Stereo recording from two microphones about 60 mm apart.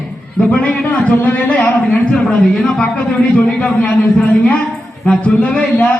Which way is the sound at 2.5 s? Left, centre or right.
Centre.